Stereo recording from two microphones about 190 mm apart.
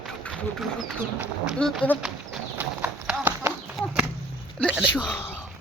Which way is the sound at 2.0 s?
5° right (ahead or behind).